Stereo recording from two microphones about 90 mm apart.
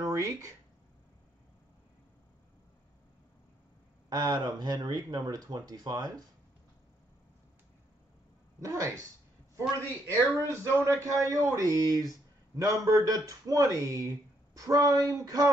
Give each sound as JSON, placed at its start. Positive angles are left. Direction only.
{"t": 0.0, "sound": "speech", "side_deg": -40}
{"t": 4.1, "sound": "speech", "side_deg": -50}
{"t": 8.5, "sound": "speech", "side_deg": -35}
{"t": 10.3, "sound": "speech", "side_deg": -35}